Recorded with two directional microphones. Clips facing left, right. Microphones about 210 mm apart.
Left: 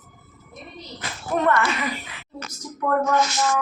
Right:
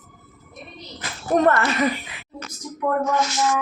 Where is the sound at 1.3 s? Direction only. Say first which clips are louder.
Right 3 dB; 40° right (ahead or behind).